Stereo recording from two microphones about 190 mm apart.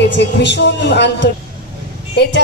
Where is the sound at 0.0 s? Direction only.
65° left (ahead or behind).